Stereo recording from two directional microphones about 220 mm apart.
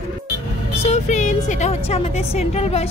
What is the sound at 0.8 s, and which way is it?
Speech, 30° left (ahead or behind).